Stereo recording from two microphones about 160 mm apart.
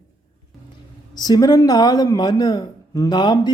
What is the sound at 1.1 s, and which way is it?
Speech, 25° left (ahead or behind).